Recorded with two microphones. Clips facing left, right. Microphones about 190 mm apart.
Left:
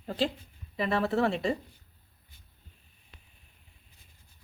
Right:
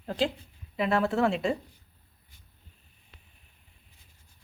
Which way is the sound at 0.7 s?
Centre (ahead or behind).